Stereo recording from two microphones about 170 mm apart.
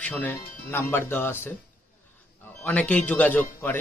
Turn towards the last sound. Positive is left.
turn(degrees=10)  # may be behind; listen again after turning